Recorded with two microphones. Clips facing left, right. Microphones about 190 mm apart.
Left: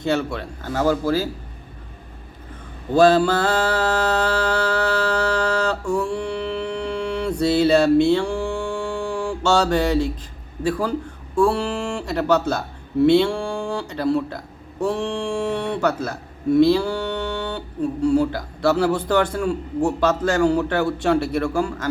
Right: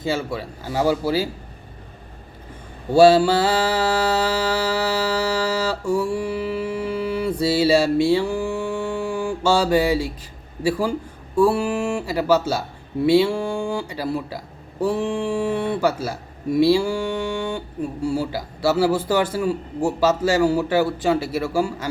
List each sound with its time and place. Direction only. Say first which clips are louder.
0.0 s speech: left 2 dB; 5° right (ahead or behind)
2.9 s mantra: right 2 dB; 10° right (ahead or behind)
10.6 s a man's voice: right 1 dB; 10° right (ahead or behind)